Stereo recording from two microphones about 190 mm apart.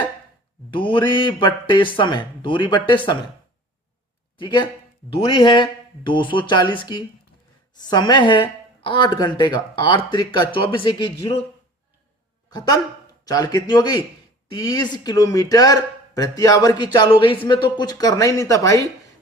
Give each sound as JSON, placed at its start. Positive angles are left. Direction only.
{"t": 0.7, "sound": "speech", "side_deg": 25}
{"t": 4.4, "sound": "speech", "side_deg": 25}
{"t": 12.5, "sound": "speech", "side_deg": 20}